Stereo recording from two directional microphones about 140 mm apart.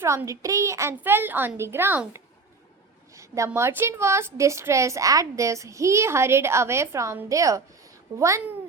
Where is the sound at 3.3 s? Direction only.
20° right (ahead or behind).